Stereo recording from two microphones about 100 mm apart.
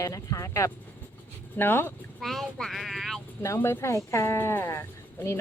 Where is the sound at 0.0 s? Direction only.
35° left (ahead or behind).